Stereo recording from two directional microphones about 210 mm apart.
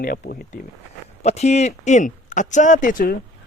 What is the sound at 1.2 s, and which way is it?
Speech, 30° left (ahead or behind).